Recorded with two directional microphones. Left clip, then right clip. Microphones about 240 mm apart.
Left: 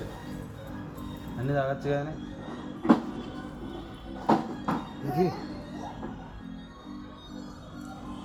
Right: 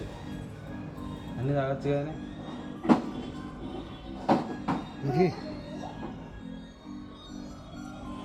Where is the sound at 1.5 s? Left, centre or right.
Centre.